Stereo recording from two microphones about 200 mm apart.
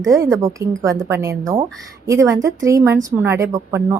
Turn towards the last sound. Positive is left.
turn(degrees=-15)  # may be behind; listen again after turning